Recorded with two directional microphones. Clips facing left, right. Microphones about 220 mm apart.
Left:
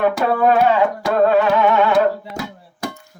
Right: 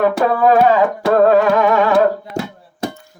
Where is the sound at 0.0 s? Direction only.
40° right (ahead or behind).